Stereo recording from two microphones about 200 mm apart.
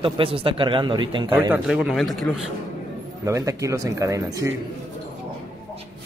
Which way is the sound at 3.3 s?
15° right (ahead or behind).